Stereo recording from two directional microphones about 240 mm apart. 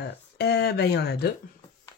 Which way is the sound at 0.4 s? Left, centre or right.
Left.